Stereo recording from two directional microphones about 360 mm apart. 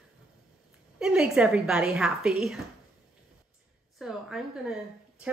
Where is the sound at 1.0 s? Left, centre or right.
Centre.